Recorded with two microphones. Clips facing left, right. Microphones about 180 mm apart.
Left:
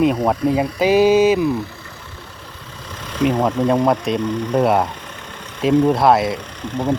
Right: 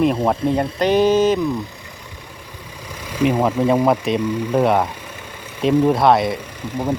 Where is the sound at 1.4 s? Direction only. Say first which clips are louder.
Left 2 dB; 15° right (ahead or behind).